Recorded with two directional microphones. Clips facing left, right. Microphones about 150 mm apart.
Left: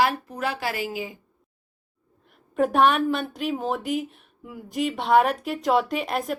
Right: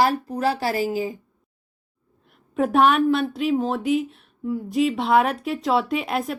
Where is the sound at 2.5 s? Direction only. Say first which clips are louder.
Right 2 dB; centre (ahead or behind).